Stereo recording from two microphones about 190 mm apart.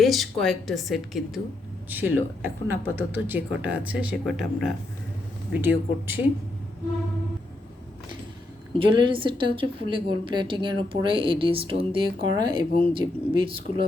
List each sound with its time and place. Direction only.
0.0 s a woman's voice: centre (ahead or behind)
8.7 s a woman's voice: 25° right (ahead or behind)